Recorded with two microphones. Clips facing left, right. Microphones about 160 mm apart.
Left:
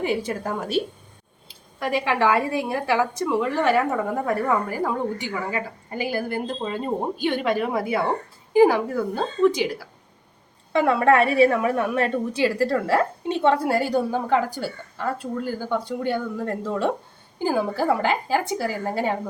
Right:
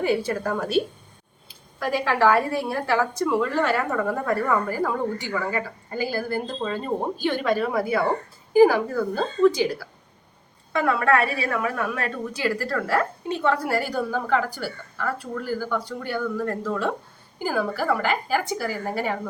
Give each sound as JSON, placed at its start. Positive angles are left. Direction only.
{"t": 0.0, "sound": "a woman's voice", "side_deg": 20}
{"t": 1.8, "sound": "a woman's voice", "side_deg": 20}
{"t": 10.7, "sound": "a woman's voice", "side_deg": 25}